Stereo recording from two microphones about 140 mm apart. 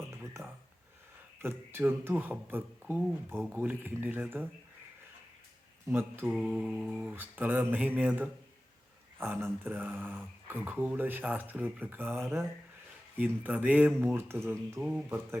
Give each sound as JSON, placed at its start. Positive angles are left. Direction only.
{"t": 0.1, "sound": "a sound", "side_deg": -20}
{"t": 1.4, "sound": "speech", "side_deg": -15}
{"t": 5.9, "sound": "speech", "side_deg": -15}
{"t": 6.3, "sound": "speech", "side_deg": -5}